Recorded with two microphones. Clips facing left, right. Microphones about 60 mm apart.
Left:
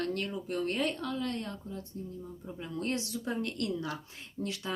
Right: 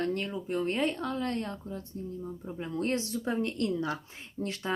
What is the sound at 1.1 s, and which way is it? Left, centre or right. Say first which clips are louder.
Speech: right 3 dB; right.